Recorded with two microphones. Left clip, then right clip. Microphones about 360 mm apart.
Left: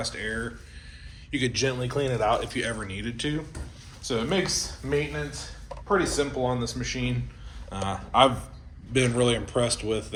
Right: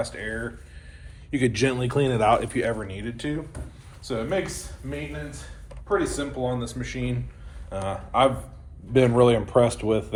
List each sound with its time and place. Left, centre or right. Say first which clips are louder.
0.0 s speech: right 1 dB; centre
1.3 s a man's voice: right 3 dB; centre
6.0 s a man's voice: left 1 dB; centre
8.9 s a man's voice: right 5 dB; centre